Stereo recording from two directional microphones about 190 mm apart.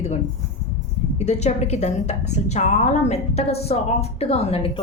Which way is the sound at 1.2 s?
35° left (ahead or behind).